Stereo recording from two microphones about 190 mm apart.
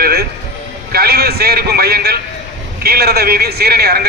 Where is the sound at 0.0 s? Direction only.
55° right (ahead or behind).